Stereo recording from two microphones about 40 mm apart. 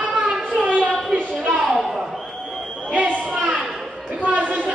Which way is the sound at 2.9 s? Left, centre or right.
Right.